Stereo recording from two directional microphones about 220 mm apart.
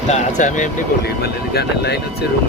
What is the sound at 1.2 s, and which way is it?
Speech, 50° left (ahead or behind).